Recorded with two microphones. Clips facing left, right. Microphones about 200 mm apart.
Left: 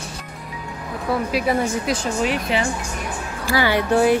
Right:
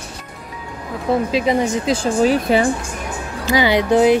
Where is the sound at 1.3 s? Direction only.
20° right (ahead or behind); by 2.6 s 35° right (ahead or behind).